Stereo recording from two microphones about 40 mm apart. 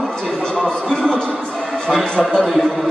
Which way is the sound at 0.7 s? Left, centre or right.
Left.